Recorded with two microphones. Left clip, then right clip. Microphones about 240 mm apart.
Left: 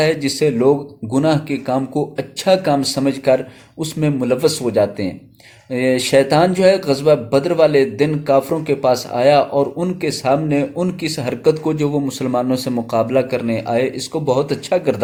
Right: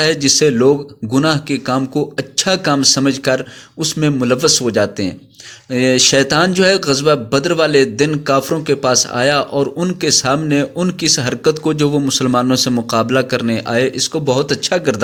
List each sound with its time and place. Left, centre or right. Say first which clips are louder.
0.0 s speech: right 3 dB; right